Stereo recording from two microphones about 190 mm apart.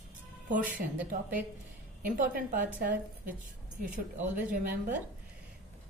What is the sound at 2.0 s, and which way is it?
A woman's voice, 45° right (ahead or behind).